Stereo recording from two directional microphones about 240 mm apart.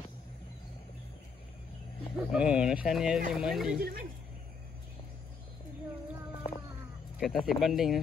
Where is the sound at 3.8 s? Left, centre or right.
Right.